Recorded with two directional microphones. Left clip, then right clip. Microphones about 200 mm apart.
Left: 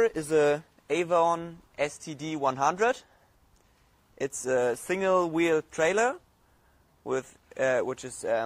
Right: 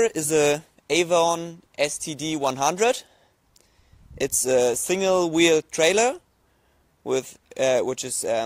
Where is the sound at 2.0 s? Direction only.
80° right.